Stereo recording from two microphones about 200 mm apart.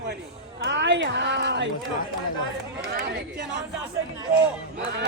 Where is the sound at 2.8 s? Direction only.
50° right (ahead or behind).